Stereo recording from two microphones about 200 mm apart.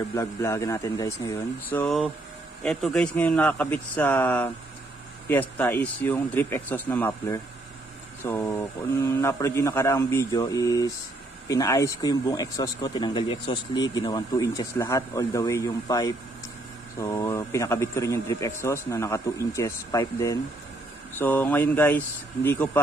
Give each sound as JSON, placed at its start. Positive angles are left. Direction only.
{"t": 0.1, "sound": "a man's voice", "side_deg": 15}
{"t": 5.6, "sound": "a man's voice", "side_deg": 10}